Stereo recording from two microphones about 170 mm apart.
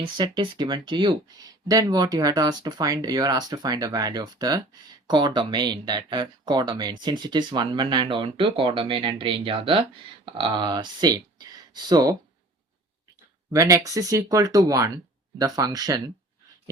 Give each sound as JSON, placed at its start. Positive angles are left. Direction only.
{"t": 0.0, "sound": "speech", "side_deg": -30}
{"t": 13.5, "sound": "speech", "side_deg": -20}